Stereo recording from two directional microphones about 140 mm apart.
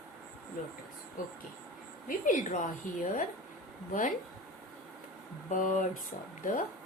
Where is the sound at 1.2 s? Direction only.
80° left.